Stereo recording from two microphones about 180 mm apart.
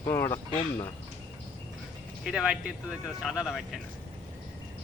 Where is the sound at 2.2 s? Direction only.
5° right (ahead or behind).